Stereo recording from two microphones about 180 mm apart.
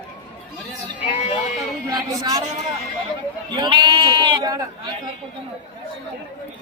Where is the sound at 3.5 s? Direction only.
25° right (ahead or behind).